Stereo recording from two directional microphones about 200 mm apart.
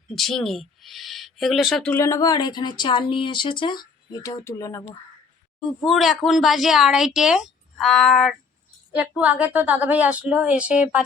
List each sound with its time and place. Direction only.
0.2 s speech: centre (ahead or behind)
5.5 s a woman's voice: centre (ahead or behind)